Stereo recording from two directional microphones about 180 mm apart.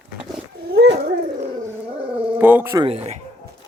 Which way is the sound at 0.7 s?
80° right.